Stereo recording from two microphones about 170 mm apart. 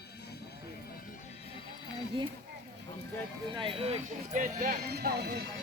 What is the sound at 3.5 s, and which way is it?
Speech, 30° right (ahead or behind).